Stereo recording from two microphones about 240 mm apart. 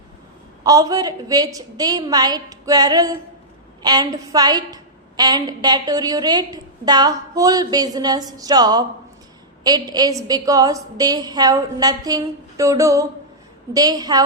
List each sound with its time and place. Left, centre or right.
0.6 s a woman's voice: centre